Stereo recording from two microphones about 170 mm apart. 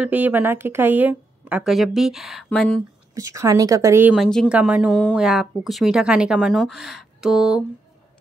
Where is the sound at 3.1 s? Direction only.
20° right (ahead or behind).